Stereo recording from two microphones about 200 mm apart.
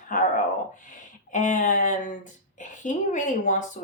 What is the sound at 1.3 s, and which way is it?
Speech, 40° left (ahead or behind).